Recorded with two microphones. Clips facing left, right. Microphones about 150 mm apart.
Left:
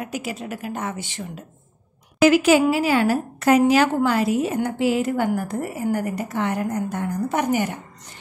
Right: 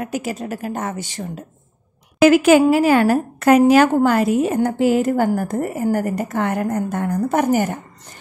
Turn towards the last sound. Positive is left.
turn(degrees=-45)  # may be behind; listen again after turning